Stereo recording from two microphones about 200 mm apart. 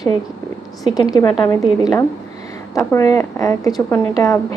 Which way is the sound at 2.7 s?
15° left (ahead or behind).